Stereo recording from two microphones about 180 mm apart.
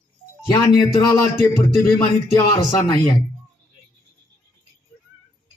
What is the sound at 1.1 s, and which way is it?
A man's voice, 15° left (ahead or behind).